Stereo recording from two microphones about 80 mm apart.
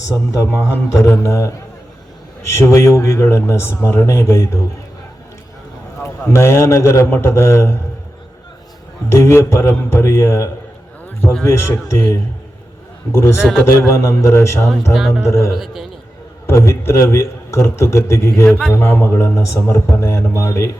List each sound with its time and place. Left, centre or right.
0.1 s a man's voice: left
6.3 s a man's voice: left
9.0 s a man's voice: left
14.9 s a man's voice: centre
15.2 s a man's voice: left
15.5 s a man's voice: centre
16.5 s a man's voice: left